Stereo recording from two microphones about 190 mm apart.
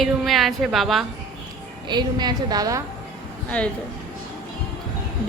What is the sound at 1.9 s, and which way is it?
Speech, 20° right (ahead or behind).